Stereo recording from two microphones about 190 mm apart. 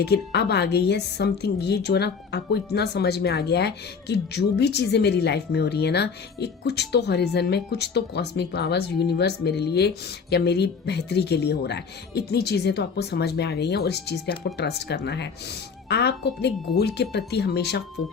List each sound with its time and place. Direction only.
0.0 s speech: 60° left (ahead or behind)